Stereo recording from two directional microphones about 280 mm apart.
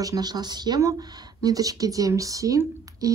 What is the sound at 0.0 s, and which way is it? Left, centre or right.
Speech, centre.